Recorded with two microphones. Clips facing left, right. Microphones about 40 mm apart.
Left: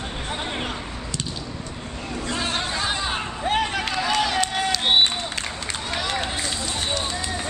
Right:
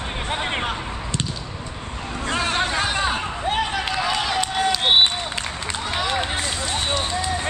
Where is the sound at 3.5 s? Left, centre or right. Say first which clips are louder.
Even; centre.